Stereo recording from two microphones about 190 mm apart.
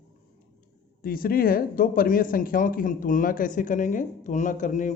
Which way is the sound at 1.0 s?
50° left (ahead or behind).